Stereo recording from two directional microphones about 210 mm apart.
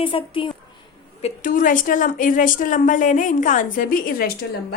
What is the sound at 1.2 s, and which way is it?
A woman's voice, 40° left (ahead or behind).